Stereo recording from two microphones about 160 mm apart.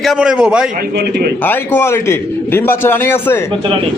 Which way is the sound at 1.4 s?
10° left (ahead or behind).